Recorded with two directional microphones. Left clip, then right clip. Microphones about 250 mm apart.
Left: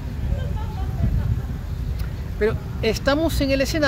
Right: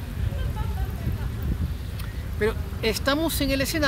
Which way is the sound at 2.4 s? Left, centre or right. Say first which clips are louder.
Left 3 dB; centre.